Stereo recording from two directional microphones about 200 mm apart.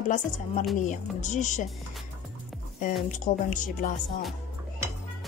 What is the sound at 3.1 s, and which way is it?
Speech, 40° left (ahead or behind).